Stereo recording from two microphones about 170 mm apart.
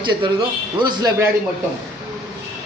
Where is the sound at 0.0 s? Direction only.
30° right (ahead or behind).